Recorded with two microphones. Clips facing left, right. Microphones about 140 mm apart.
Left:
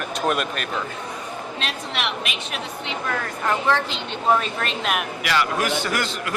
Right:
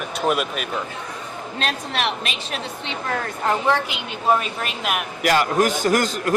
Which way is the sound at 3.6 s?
15° right (ahead or behind).